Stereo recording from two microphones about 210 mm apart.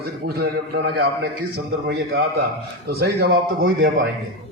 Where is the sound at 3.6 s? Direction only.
65° right (ahead or behind).